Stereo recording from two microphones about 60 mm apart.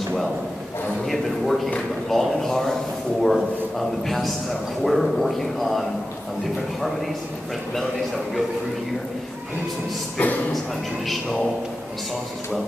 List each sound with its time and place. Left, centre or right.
1.0 s a man's voice: centre
10.1 s a man's voice: left